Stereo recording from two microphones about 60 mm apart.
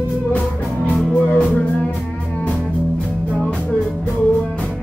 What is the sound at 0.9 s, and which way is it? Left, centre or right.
Music, left.